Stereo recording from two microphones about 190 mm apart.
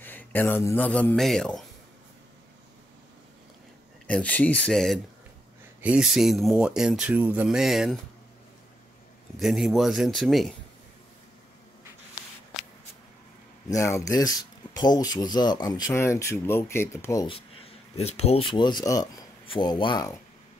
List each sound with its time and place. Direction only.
0.0 s a man's voice: 10° left (ahead or behind)
4.1 s speech: 5° left (ahead or behind)
9.4 s speech: centre (ahead or behind)
13.7 s speech: 15° left (ahead or behind)
17.9 s speech: 35° left (ahead or behind)